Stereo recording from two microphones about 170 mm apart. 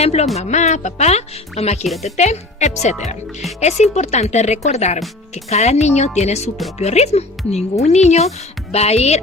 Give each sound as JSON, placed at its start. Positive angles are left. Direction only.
{"t": 0.0, "sound": "speech", "side_deg": 40}